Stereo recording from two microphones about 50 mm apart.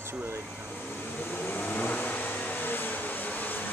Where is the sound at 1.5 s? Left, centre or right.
Left.